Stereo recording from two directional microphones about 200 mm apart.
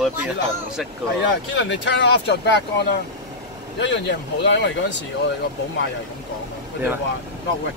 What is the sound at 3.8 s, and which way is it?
Speech, 60° left (ahead or behind).